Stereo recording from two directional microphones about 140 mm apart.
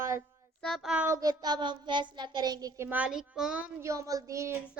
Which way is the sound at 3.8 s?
20° right (ahead or behind).